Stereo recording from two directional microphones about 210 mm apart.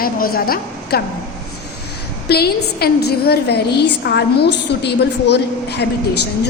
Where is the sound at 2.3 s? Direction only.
50° left (ahead or behind).